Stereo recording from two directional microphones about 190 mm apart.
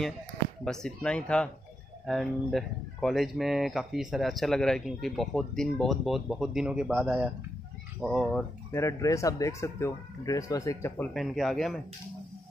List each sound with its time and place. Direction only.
0.7 s speech: 5° left (ahead or behind)
8.7 s speech: 15° left (ahead or behind)
11.1 s speech: centre (ahead or behind)